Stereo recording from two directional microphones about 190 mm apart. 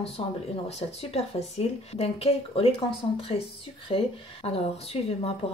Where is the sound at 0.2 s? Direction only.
30° left (ahead or behind).